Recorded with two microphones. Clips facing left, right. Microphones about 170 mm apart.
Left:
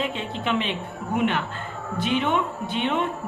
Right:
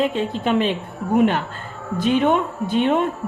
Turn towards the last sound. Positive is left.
turn(degrees=-45)  # may be behind; listen again after turning